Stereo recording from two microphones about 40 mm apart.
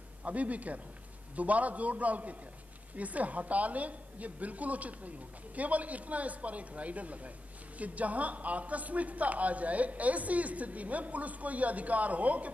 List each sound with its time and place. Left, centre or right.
0.2 s a man's voice: right